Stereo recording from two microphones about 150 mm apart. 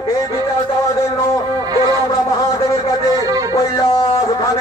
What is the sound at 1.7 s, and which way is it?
Music, 25° right (ahead or behind).